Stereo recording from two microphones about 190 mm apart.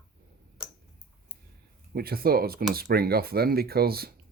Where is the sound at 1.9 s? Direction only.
55° right (ahead or behind).